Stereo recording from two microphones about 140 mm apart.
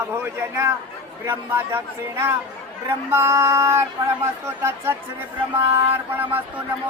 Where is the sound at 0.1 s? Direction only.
20° right (ahead or behind).